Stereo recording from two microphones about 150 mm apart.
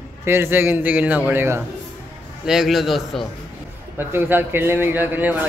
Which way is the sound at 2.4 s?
Centre (ahead or behind).